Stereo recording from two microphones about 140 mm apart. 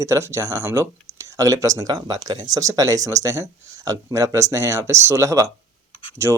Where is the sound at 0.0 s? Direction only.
20° right (ahead or behind).